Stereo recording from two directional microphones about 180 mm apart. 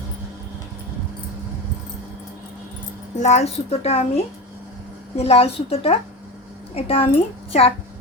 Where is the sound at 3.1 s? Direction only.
40° left (ahead or behind).